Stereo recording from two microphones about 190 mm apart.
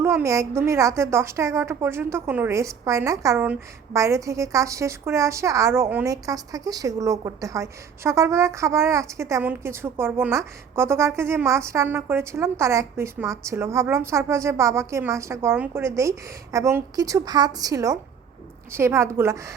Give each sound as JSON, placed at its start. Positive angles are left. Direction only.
{"t": 0.0, "sound": "a woman's voice", "side_deg": -15}